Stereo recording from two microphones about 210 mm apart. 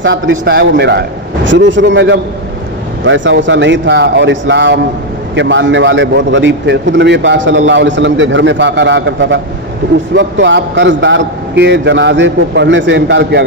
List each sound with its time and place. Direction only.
0.0 s a man's voice: 60° right (ahead or behind)